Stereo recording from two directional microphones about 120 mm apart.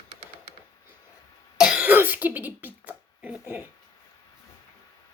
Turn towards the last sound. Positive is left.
turn(degrees=-15)  # may be behind; listen again after turning